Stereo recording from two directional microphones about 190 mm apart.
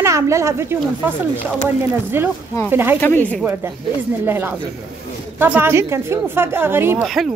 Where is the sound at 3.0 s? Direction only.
10° left (ahead or behind).